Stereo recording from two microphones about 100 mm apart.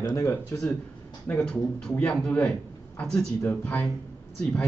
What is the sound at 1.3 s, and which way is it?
A man's voice, 10° left (ahead or behind).